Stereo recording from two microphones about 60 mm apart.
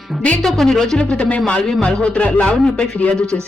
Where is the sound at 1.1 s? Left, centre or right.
Left.